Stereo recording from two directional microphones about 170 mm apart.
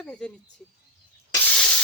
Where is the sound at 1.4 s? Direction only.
5° left (ahead or behind).